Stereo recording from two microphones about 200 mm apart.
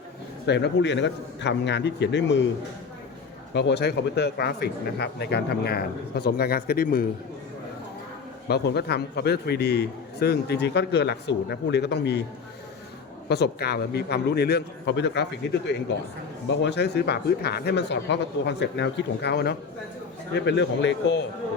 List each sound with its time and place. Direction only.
0.4 s a man's voice: 60° left (ahead or behind)
3.5 s speech: 60° left (ahead or behind)
8.4 s a man's voice: 55° left (ahead or behind)
13.2 s a man's voice: 55° left (ahead or behind)